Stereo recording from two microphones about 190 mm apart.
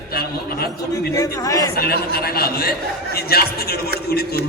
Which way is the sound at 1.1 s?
15° left (ahead or behind).